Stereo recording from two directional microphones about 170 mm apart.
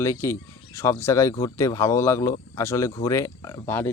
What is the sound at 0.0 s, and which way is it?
Speech, 15° left (ahead or behind).